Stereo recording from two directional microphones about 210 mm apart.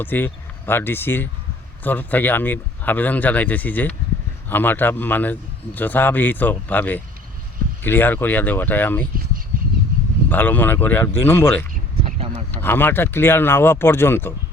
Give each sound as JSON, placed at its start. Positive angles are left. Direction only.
{"t": 0.0, "sound": "a man's voice", "side_deg": 10}
{"t": 10.2, "sound": "a man's voice", "side_deg": 10}
{"t": 11.7, "sound": "a sound", "side_deg": -30}
{"t": 12.6, "sound": "a man's voice", "side_deg": 10}